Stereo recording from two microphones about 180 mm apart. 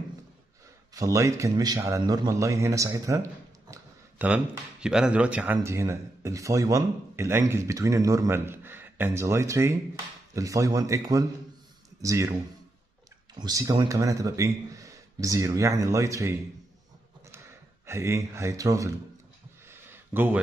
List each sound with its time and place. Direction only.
0.9 s speech: 20° right (ahead or behind)
13.4 s speech: 20° right (ahead or behind)
17.8 s speech: 15° right (ahead or behind)
19.7 s a sound: 10° right (ahead or behind)